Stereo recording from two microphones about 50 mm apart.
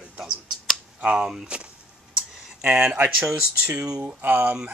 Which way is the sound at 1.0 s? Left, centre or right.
Centre.